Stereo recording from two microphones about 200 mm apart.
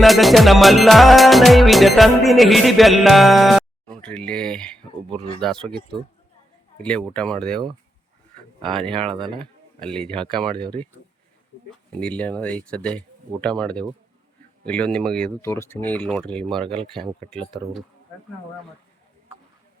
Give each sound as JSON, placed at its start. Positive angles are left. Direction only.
{"t": 0.0, "sound": "music", "side_deg": 0}
{"t": 9.1, "sound": "speech", "side_deg": -25}
{"t": 9.8, "sound": "music", "side_deg": 5}
{"t": 10.8, "sound": "speech", "side_deg": -35}
{"t": 11.9, "sound": "music", "side_deg": 5}
{"t": 15.4, "sound": "speech", "side_deg": 15}
{"t": 16.7, "sound": "music", "side_deg": 0}